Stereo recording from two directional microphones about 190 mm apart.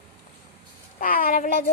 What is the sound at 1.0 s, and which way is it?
Speech, 50° left (ahead or behind).